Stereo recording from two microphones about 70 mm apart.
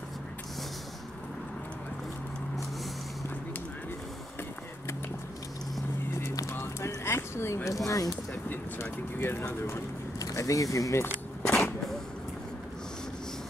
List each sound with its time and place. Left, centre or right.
6.1 s a sound: left
6.5 s music: left
7.1 s speech: left
8.5 s speech: left
10.1 s vehicle: left